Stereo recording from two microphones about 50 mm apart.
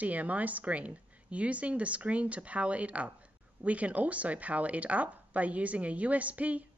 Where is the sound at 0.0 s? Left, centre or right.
Right.